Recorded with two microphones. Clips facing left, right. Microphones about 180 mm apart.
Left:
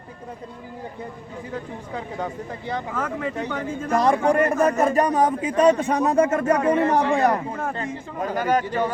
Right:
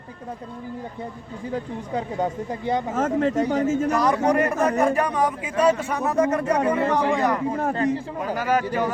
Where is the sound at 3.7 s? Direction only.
80° right.